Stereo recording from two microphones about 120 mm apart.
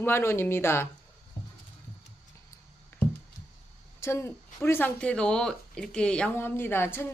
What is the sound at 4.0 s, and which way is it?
Speech, 20° left (ahead or behind).